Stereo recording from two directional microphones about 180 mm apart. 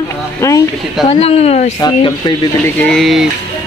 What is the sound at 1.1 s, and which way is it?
Speech, 35° left (ahead or behind).